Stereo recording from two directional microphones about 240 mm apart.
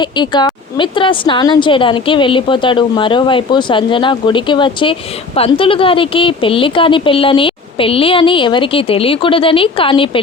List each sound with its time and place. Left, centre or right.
0.0 s a woman's voice: centre